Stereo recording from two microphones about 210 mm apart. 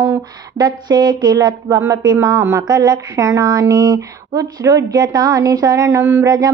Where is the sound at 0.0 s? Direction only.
15° right (ahead or behind).